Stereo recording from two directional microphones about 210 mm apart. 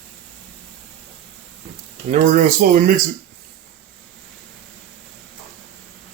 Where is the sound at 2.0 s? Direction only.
35° right (ahead or behind).